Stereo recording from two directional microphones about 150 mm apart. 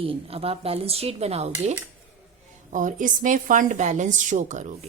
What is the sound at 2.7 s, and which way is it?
A woman's voice, 60° right (ahead or behind).